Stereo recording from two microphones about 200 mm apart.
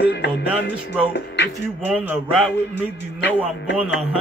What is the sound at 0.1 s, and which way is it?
Music, 55° left (ahead or behind).